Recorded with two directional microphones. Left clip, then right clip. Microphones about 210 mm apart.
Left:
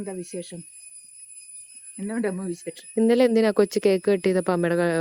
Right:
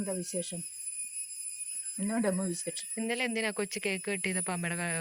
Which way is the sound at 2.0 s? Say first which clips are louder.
Left 4 dB; 20° left (ahead or behind).